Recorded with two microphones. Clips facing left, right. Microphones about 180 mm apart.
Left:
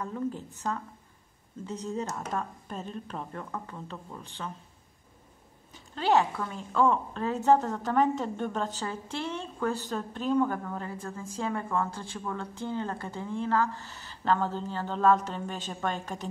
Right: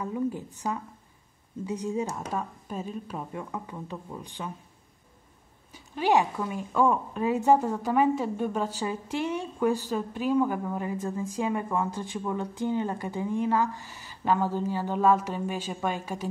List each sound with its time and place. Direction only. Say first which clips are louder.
0.0 s a woman's voice: right 3 dB; 10° right (ahead or behind)
5.7 s a woman's voice: right 1 dB; 10° right (ahead or behind)